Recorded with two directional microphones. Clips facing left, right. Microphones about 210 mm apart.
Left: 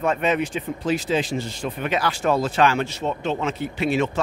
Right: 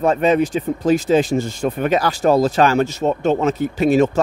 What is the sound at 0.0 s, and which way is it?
Speech, 35° right (ahead or behind).